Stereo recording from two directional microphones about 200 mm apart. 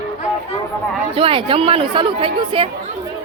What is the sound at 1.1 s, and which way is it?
Speech, 25° right (ahead or behind).